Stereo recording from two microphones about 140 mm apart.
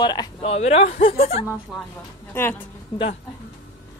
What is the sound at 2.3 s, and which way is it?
Speech, 15° left (ahead or behind).